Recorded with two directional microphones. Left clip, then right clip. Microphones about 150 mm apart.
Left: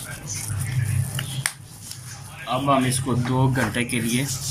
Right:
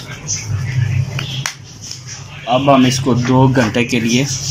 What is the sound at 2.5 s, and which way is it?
Speech, 45° right (ahead or behind).